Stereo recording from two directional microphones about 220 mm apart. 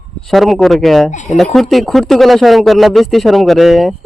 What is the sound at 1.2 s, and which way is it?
Speech, centre (ahead or behind).